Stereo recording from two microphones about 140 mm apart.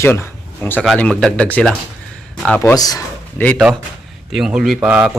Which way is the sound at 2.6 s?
25° left (ahead or behind).